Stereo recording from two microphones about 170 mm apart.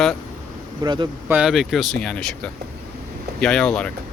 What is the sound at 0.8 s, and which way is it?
Speech, 25° right (ahead or behind).